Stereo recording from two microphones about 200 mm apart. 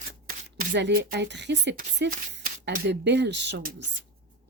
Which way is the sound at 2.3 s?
60° right (ahead or behind).